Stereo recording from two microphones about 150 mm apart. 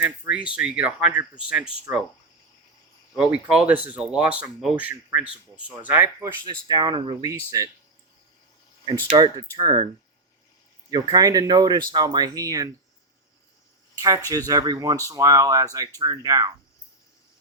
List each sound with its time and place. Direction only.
0.0 s speech: 10° right (ahead or behind)
1.9 s speech: 20° right (ahead or behind)
3.3 s speech: 5° right (ahead or behind)
6.2 s speech: 30° right (ahead or behind)
8.9 s speech: 30° right (ahead or behind)
10.9 s speech: 25° right (ahead or behind)
14.3 s speech: 25° right (ahead or behind)